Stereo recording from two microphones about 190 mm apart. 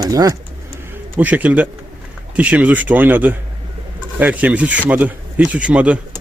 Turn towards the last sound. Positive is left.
turn(degrees=-5)  # may be behind; listen again after turning